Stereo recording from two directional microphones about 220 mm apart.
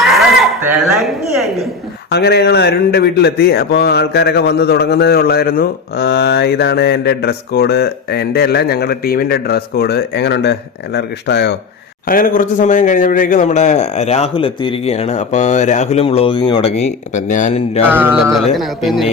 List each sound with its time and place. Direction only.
0.0 s a sound: centre (ahead or behind)
2.0 s a man's voice: 50° left (ahead or behind); by 17.8 s 30° left (ahead or behind)
17.8 s speech: 10° right (ahead or behind)